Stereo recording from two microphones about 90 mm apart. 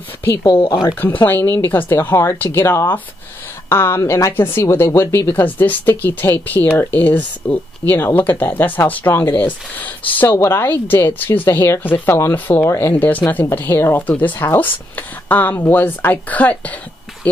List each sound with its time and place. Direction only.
0.8 s speech: 25° left (ahead or behind)
4.0 s a woman's voice: 35° left (ahead or behind)
4.3 s speech: 25° left (ahead or behind)
5.3 s speech: 20° left (ahead or behind)